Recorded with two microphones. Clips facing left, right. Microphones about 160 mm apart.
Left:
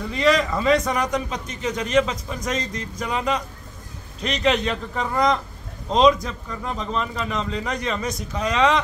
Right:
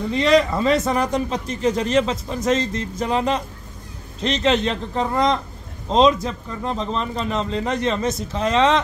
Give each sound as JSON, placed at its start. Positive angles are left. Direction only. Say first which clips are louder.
{"t": 0.1, "sound": "a man's voice", "louder": "right 3 dB", "side_deg": -30}